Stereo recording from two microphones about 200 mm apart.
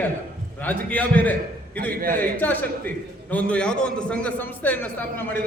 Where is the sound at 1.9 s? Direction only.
45° right (ahead or behind).